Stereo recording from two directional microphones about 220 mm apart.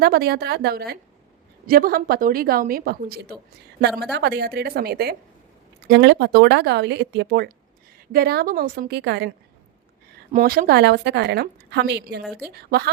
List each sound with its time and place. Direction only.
0.0 s a woman's voice: 45° right (ahead or behind)
10.3 s a woman's voice: 40° right (ahead or behind)